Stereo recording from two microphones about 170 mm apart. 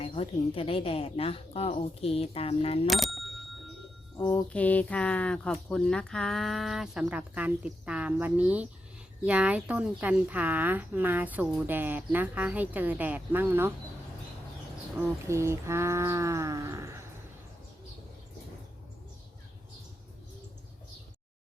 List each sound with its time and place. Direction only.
0.0 s a woman's voice: 35° left (ahead or behind)
2.8 s bicycle bell: centre (ahead or behind)
4.3 s a woman's voice: 10° left (ahead or behind); by 13.7 s 10° right (ahead or behind)
15.0 s a woman's voice: 15° right (ahead or behind)